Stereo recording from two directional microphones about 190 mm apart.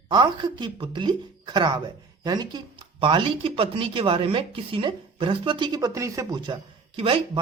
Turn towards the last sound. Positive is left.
turn(degrees=-30)  # may be behind; listen again after turning